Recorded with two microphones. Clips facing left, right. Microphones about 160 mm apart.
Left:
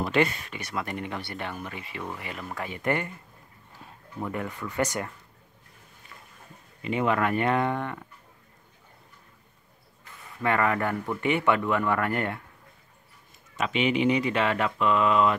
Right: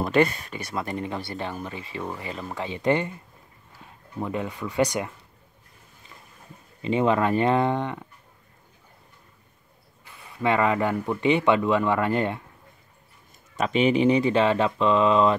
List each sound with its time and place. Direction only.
0.0 s speech: 40° right (ahead or behind); by 3.2 s 20° right (ahead or behind)
4.2 s speech: 20° right (ahead or behind)
6.8 s speech: 25° right (ahead or behind)
10.4 s speech: 20° right (ahead or behind)
13.6 s speech: 35° right (ahead or behind)